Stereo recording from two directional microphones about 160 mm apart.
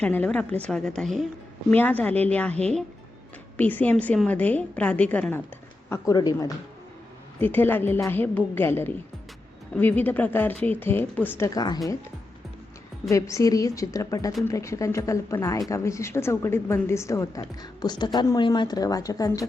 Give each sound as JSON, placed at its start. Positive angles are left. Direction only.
{"t": 0.0, "sound": "a woman's voice", "side_deg": 10}
{"t": 5.9, "sound": "a woman's voice", "side_deg": 20}
{"t": 7.3, "sound": "speech", "side_deg": 10}
{"t": 13.1, "sound": "a woman's voice", "side_deg": 20}